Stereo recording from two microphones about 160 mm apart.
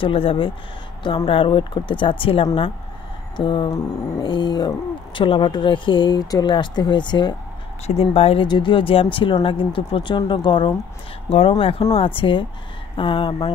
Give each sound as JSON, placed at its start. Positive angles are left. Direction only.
{"t": 0.0, "sound": "speech", "side_deg": 35}
{"t": 3.3, "sound": "a sound", "side_deg": 30}
{"t": 7.8, "sound": "speech", "side_deg": 40}